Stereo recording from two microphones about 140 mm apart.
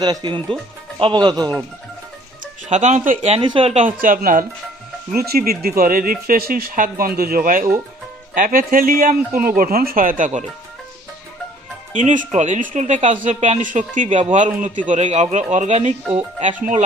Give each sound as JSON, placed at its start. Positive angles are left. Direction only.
{"t": 0.0, "sound": "speech", "side_deg": -30}
{"t": 2.6, "sound": "a man's voice", "side_deg": -55}
{"t": 3.2, "sound": "speech", "side_deg": -40}
{"t": 3.8, "sound": "speech", "side_deg": -75}
{"t": 11.9, "sound": "a man's voice", "side_deg": -65}